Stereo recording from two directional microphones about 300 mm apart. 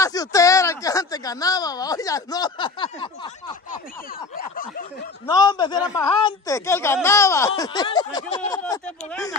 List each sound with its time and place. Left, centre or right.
0.0 s speech: centre
4.4 s snicker: left
5.2 s speech: centre